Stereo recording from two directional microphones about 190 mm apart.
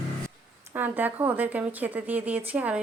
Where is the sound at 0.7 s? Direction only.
10° right (ahead or behind).